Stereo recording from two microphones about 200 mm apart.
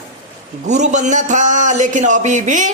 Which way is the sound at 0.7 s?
35° right (ahead or behind).